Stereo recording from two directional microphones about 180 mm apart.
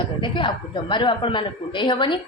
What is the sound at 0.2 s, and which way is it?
A woman's voice, 25° left (ahead or behind).